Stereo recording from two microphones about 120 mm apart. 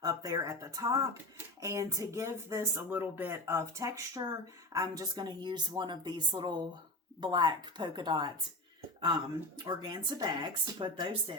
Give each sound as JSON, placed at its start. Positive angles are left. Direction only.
{"t": 0.0, "sound": "speech", "side_deg": -30}
{"t": 9.6, "sound": "speech", "side_deg": -35}